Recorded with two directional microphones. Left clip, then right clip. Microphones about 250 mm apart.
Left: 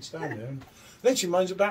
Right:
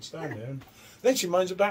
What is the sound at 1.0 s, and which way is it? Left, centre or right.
Speech, centre.